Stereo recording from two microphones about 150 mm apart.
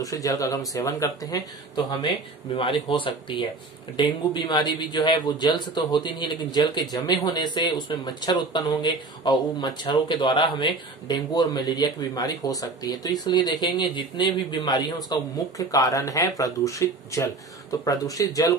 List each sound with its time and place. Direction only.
0.0 s a man's voice: 25° left (ahead or behind)